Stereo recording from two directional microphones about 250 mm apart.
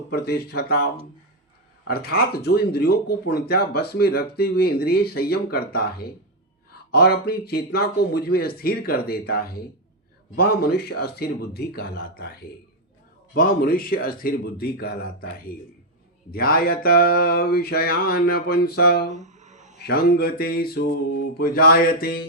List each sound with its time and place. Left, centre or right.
0.1 s speech: left
1.9 s speech: left
13.3 s speech: left
19.1 s a sound: right
19.9 s speech: left